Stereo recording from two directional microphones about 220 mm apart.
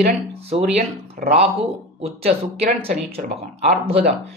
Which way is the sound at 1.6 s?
25° right (ahead or behind).